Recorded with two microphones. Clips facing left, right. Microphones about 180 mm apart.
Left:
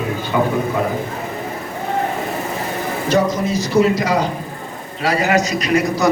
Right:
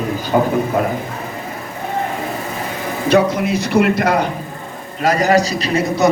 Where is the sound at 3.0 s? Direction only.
60° right (ahead or behind).